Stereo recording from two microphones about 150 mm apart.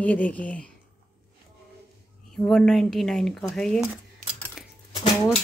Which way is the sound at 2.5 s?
5° left (ahead or behind).